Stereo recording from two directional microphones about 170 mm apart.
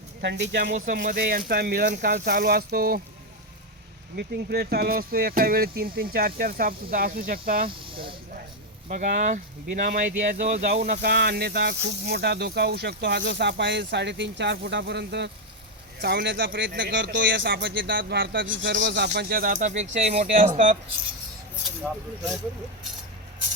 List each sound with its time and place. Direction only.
0.2 s speech: 90° right
0.9 s speech: 55° right (ahead or behind)
4.1 s speech: 75° right (ahead or behind)
7.7 s speech: 30° right (ahead or behind)
8.9 s speech: 45° right (ahead or behind)
11.0 s a man's voice: 70° right (ahead or behind); by 20.5 s 40° right (ahead or behind)